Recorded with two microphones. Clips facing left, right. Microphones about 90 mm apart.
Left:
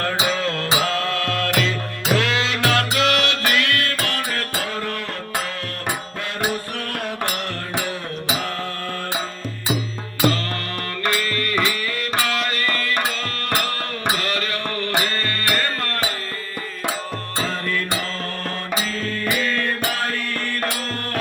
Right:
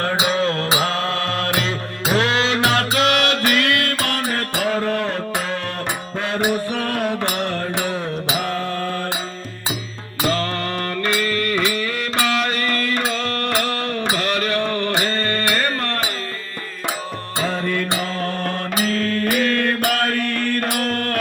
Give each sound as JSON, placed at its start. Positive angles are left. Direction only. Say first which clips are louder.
{"t": 0.0, "sound": "mantra", "louder": "right 3 dB", "side_deg": -35}
{"t": 0.7, "sound": "music", "louder": "right 1 dB", "side_deg": -35}
{"t": 4.6, "sound": "a sound", "louder": "right 6 dB", "side_deg": -45}
{"t": 7.3, "sound": "music", "louder": "right 4 dB", "side_deg": -25}
{"t": 10.2, "sound": "music", "louder": "left 1 dB", "side_deg": -25}
{"t": 11.6, "sound": "music", "louder": "right 2 dB", "side_deg": -25}
{"t": 17.3, "sound": "music", "louder": "right 3 dB", "side_deg": -15}
{"t": 17.7, "sound": "mantra", "louder": "right 3 dB", "side_deg": -20}
{"t": 18.7, "sound": "mantra", "louder": "right 5 dB", "side_deg": -55}